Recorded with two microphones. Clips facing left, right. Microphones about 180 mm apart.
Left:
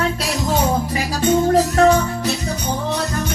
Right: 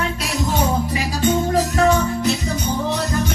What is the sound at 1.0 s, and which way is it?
Music, centre (ahead or behind).